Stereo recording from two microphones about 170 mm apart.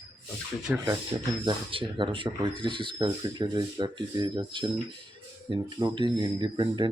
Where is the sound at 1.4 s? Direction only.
30° right (ahead or behind).